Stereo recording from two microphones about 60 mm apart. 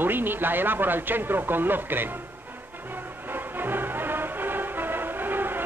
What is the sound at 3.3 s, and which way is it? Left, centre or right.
Music, right.